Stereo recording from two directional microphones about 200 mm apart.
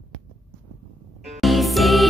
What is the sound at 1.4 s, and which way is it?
Music, centre (ahead or behind).